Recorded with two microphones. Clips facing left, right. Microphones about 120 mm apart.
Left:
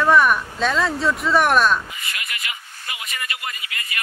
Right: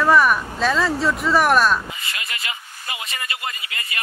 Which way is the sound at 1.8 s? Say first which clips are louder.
Right 1 dB; 30° right (ahead or behind).